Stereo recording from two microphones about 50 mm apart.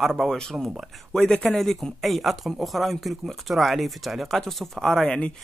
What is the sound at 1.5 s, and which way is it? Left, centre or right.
Speech, centre.